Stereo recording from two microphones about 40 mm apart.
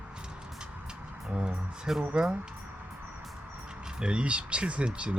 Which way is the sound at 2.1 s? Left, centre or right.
Right.